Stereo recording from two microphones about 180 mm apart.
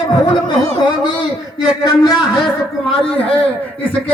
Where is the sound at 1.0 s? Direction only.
25° left (ahead or behind).